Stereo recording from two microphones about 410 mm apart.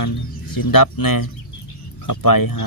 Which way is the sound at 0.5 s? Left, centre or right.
Left.